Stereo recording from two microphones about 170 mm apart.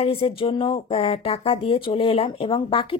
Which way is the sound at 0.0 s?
35° left (ahead or behind).